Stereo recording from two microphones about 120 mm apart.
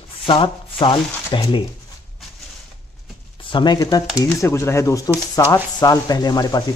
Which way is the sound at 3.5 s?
40° left (ahead or behind).